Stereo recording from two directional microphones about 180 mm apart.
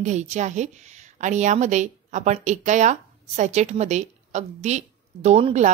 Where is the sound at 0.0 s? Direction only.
40° right (ahead or behind).